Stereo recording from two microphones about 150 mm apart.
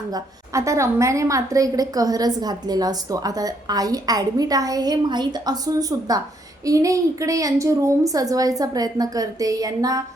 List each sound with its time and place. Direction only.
0.1 s a woman's voice: 20° right (ahead or behind)